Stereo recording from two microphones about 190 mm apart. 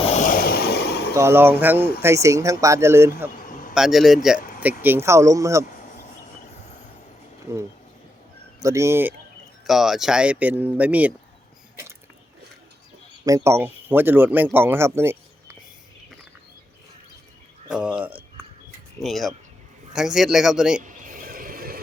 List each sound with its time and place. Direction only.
0.1 s vehicle: 40° left (ahead or behind); by 1.1 s 60° left (ahead or behind)
1.1 s speech: 15° right (ahead or behind)
3.3 s a sound: 45° left (ahead or behind)
3.8 s a man's voice: centre (ahead or behind)
4.4 s a sound: 45° left (ahead or behind)
4.8 s speech: 10° right (ahead or behind)
5.9 s train: 40° left (ahead or behind)
8.6 s speech: 15° right (ahead or behind)
9.6 s speech: centre (ahead or behind)
13.2 s speech: 15° right (ahead or behind)
17.7 s a man's voice: 5° right (ahead or behind)
20.8 s a sound: 45° right (ahead or behind)